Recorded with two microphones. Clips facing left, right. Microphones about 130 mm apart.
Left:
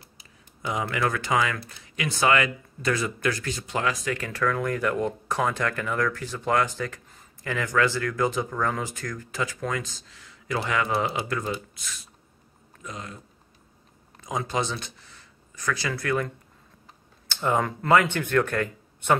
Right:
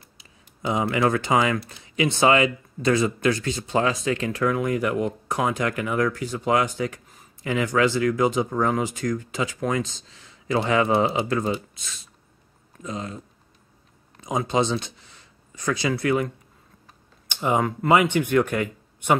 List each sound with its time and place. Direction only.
0.6 s speech: 25° right (ahead or behind)
14.2 s speech: 20° right (ahead or behind)
17.3 s a sound: 15° right (ahead or behind)
17.6 s speech: 10° right (ahead or behind)